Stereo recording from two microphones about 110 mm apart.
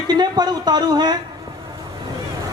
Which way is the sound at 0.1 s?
40° right (ahead or behind).